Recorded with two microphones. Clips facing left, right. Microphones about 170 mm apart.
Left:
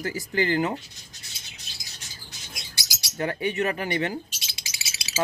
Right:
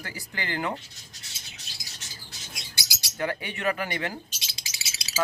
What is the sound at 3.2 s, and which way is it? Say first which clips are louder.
Speech: left 4 dB; 30° left (ahead or behind).